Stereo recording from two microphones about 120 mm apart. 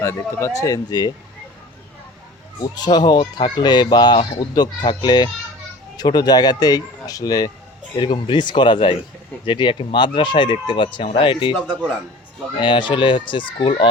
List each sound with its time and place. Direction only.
0.0 s speech: 25° left (ahead or behind)
2.6 s speech: 35° left (ahead or behind)
7.9 s speech: 40° left (ahead or behind)
12.5 s speech: 45° left (ahead or behind)